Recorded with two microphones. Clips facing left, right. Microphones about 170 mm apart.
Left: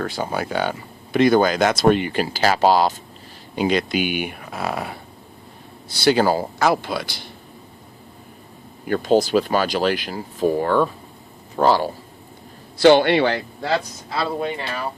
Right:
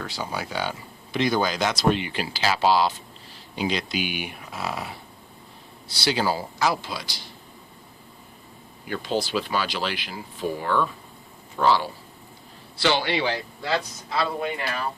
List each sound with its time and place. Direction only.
0.0 s speech: 55° left (ahead or behind)
8.8 s speech: 45° left (ahead or behind)
14.2 s speech: 25° left (ahead or behind)